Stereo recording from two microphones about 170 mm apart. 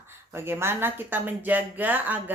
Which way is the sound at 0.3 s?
15° right (ahead or behind).